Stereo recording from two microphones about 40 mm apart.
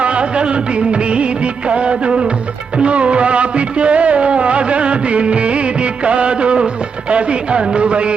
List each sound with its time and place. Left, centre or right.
0.0 s music of bollywood: right
2.7 s music: right
7.1 s music of bollywood: right